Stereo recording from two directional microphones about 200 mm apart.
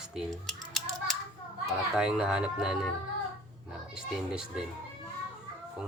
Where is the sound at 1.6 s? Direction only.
5° right (ahead or behind).